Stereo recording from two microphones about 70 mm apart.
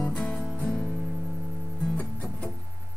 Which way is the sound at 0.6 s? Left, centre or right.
Left.